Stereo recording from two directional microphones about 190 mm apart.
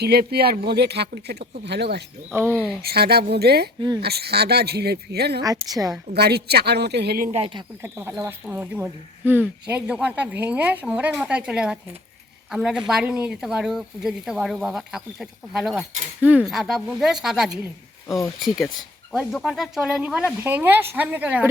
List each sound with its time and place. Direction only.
0.0 s speech: 55° right (ahead or behind)
2.4 s speech: 5° left (ahead or behind)
2.8 s speech: 55° right (ahead or behind)
3.8 s a woman's voice: 20° right (ahead or behind)
4.0 s speech: 55° right (ahead or behind)
5.4 s a woman's voice: 20° right (ahead or behind)
6.1 s speech: 60° right (ahead or behind)
7.3 s a woman's voice: 30° right (ahead or behind)
7.8 s speech: 10° right (ahead or behind)